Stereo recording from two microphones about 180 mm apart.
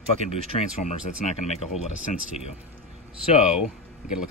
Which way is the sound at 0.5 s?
40° left (ahead or behind).